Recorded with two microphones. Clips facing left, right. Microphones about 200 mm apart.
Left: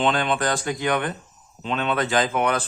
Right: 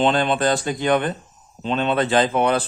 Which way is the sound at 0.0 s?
30° right (ahead or behind).